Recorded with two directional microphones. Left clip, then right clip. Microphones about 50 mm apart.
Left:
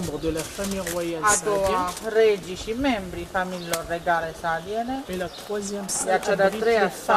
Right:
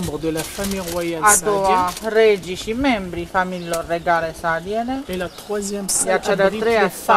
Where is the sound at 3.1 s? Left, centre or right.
Right.